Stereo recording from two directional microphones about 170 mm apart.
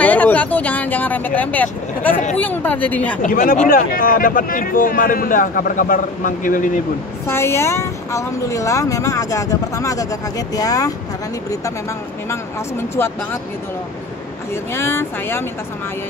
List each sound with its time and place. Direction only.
0.0 s vehicle: 10° left (ahead or behind)
2.3 s speech: 10° left (ahead or behind)
3.2 s speech: 55° left (ahead or behind)
7.2 s speech: 15° left (ahead or behind)
12.3 s speech: 15° left (ahead or behind)
14.5 s speech: 15° left (ahead or behind)